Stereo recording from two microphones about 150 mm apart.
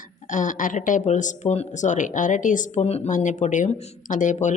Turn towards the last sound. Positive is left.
turn(degrees=55)  # may be behind; listen again after turning